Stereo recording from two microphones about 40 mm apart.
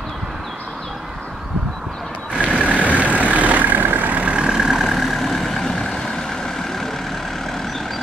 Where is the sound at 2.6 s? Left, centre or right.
Right.